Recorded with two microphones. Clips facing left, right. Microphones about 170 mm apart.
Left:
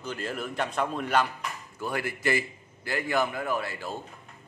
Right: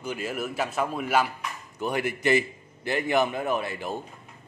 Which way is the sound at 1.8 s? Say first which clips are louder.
Right 4 dB; 20° right (ahead or behind).